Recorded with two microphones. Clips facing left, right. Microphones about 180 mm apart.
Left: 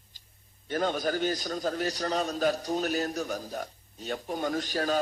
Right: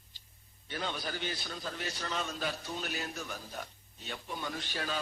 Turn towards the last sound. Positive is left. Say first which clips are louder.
# left 9 dB
turn(degrees=40)  # may be behind; listen again after turning